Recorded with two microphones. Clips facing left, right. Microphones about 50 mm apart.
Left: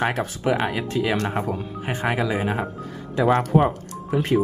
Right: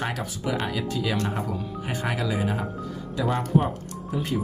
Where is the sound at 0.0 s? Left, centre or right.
Left.